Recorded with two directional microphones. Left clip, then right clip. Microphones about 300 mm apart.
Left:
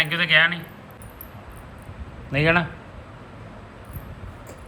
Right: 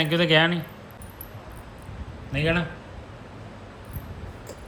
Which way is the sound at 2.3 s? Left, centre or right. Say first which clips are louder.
Left 5 dB; centre.